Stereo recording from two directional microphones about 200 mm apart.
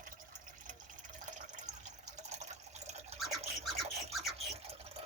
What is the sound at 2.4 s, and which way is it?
Water, 35° right (ahead or behind).